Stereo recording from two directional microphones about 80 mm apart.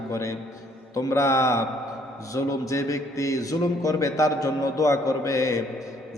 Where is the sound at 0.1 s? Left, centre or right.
Left.